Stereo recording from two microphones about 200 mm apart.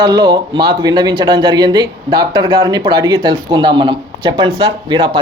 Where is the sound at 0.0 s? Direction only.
20° right (ahead or behind).